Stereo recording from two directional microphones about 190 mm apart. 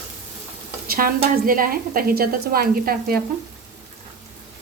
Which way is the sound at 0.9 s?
50° right (ahead or behind).